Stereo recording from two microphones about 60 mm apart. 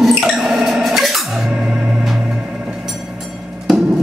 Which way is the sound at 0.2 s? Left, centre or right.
Centre.